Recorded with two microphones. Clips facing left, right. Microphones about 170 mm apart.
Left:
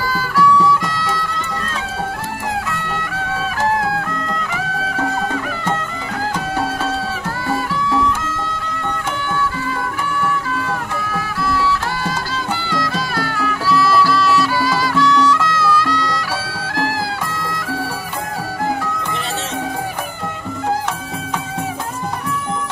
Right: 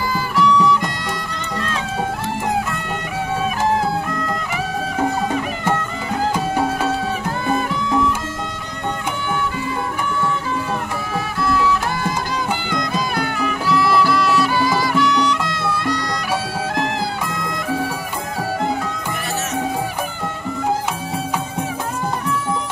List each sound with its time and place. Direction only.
0.1 s music: 20° right (ahead or behind)
7.4 s music: 20° right (ahead or behind)
11.4 s music: 20° right (ahead or behind)